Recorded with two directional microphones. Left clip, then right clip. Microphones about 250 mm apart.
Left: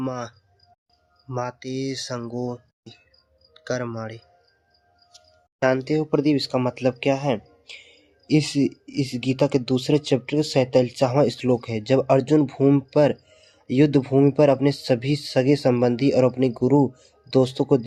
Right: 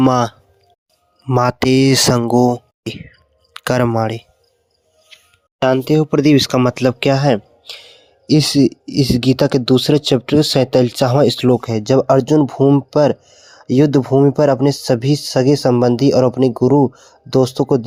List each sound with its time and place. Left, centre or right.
0.0 s speech: right
5.5 s speech: right